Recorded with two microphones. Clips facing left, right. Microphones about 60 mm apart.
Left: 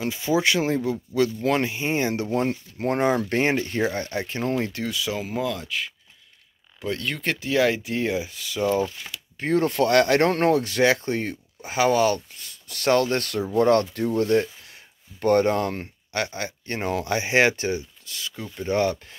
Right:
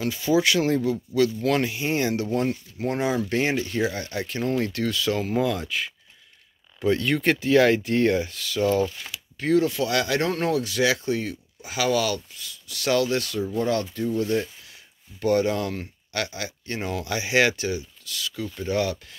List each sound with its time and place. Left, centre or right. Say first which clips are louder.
0.0 s speech: right 1 dB; left
9.4 s speech: even; left